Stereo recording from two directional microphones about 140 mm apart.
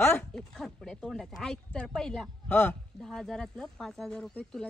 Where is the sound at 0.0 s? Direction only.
10° left (ahead or behind).